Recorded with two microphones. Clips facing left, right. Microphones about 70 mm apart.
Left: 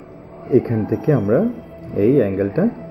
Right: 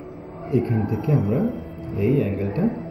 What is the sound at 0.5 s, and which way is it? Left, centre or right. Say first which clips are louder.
A man's voice: left 6 dB; left.